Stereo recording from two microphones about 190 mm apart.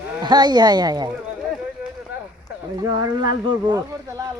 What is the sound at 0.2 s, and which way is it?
Speech, 20° right (ahead or behind).